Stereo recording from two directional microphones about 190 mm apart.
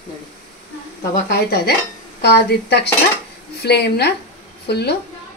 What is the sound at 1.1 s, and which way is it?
Speech, 55° left (ahead or behind).